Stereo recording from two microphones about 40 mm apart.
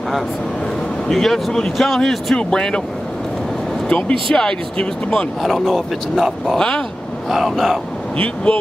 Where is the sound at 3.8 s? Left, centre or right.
Left.